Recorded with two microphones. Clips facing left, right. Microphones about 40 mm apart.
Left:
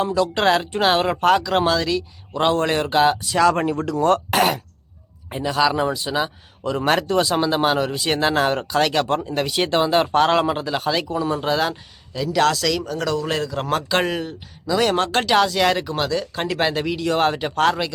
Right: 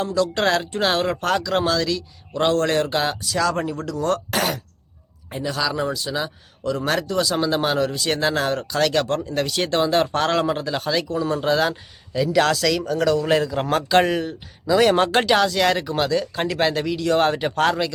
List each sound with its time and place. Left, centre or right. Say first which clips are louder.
0.0 s speech: left 2 dB; centre
3.2 s a man's voice: left 4 dB; left
7.3 s speech: left 2 dB; centre
15.3 s speech: left 1 dB; centre